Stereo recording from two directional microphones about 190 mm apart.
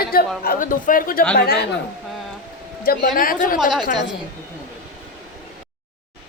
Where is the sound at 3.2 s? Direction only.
45° left (ahead or behind).